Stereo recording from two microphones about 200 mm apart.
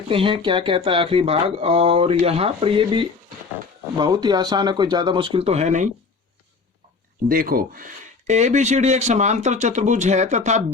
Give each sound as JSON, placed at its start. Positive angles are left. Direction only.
{"t": 0.1, "sound": "speech", "side_deg": -25}
{"t": 7.3, "sound": "speech", "side_deg": -45}